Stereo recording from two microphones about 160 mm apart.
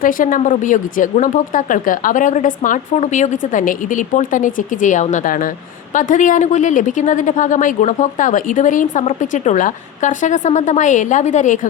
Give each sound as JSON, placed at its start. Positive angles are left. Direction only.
{"t": 0.0, "sound": "a woman's voice", "side_deg": 60}